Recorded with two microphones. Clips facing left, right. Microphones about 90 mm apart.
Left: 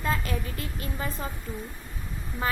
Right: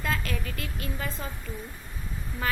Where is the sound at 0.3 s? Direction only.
30° left (ahead or behind).